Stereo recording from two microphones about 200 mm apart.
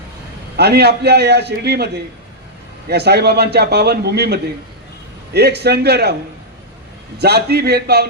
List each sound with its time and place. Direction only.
0.5 s a man's voice: 55° right (ahead or behind)
2.9 s a man's voice: 55° right (ahead or behind)
7.2 s speech: 55° right (ahead or behind)